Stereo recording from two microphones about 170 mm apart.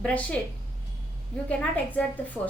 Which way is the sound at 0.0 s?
10° left (ahead or behind).